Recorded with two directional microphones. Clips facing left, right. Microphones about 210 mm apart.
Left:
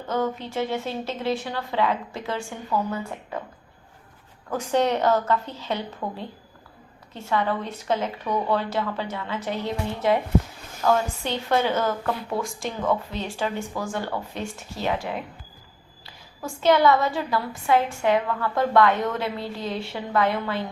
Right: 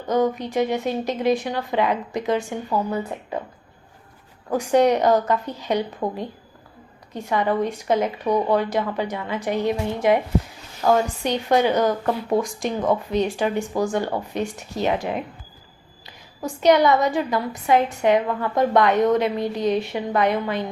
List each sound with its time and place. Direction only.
0.1 s a woman's voice: 15° right (ahead or behind)
4.4 s a woman's voice: 15° right (ahead or behind)
7.1 s a woman's voice: 15° right (ahead or behind)